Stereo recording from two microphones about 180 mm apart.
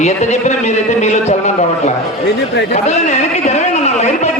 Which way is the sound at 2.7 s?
40° left (ahead or behind).